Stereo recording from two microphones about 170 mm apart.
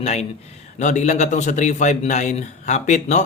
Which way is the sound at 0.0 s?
40° left (ahead or behind).